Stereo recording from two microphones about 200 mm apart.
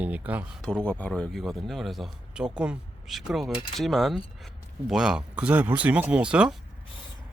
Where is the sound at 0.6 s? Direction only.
5° left (ahead or behind).